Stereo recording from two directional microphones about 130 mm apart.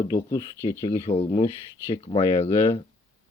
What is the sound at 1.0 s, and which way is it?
Speech, 50° left (ahead or behind).